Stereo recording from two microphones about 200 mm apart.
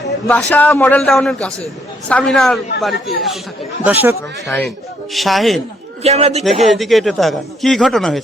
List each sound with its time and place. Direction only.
0.3 s speech: 5° left (ahead or behind)
3.8 s speech: 10° right (ahead or behind)
4.4 s speech: 5° left (ahead or behind)
6.0 s a man's voice: 30° right (ahead or behind)
6.4 s speech: centre (ahead or behind)